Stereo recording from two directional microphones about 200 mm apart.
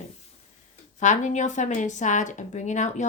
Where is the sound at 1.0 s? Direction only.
35° left (ahead or behind).